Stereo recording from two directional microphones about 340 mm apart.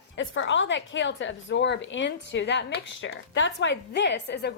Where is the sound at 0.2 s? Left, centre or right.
Left.